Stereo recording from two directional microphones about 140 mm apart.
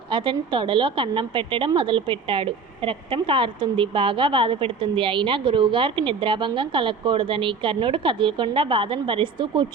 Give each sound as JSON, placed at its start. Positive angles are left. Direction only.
{"t": 0.1, "sound": "a woman's voice", "side_deg": -35}